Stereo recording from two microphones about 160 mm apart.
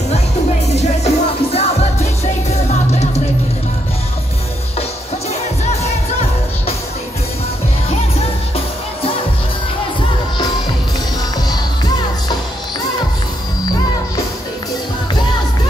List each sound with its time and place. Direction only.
0.7 s music: 40° left (ahead or behind)
11.4 s music: 25° left (ahead or behind)